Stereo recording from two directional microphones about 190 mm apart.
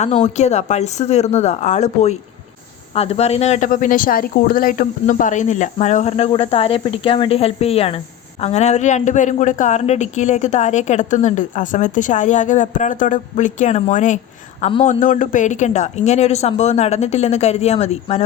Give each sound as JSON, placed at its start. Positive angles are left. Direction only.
{"t": 0.0, "sound": "a woman's voice", "side_deg": 35}